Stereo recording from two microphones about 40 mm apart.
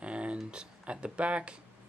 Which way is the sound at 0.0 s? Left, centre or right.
Right.